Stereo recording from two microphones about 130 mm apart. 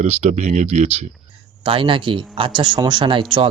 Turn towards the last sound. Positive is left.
turn(degrees=-40)  # may be behind; listen again after turning